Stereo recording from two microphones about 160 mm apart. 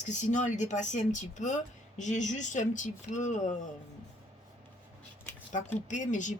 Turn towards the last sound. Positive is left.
turn(degrees=50)  # may be behind; listen again after turning